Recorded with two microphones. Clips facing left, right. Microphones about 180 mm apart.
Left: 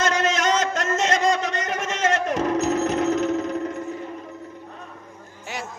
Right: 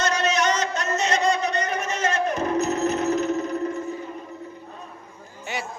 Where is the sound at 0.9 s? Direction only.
90° left.